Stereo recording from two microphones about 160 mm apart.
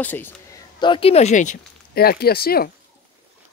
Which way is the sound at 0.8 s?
35° left (ahead or behind).